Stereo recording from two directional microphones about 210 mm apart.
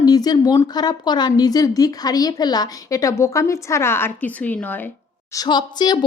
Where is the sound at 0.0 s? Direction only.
20° left (ahead or behind).